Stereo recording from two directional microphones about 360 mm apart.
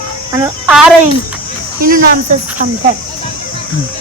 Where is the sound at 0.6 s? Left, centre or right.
Centre.